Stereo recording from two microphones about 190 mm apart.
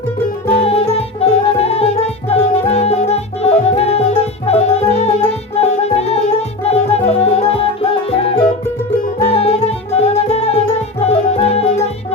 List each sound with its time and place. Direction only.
0.4 s music: 30° left (ahead or behind)